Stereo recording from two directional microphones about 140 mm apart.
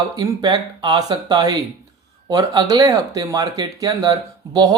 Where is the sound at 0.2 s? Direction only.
30° right (ahead or behind).